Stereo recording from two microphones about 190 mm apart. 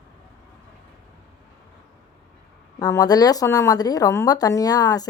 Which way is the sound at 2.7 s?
20° left (ahead or behind).